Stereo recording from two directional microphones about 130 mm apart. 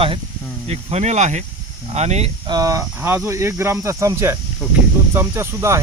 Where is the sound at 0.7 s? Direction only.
55° right (ahead or behind).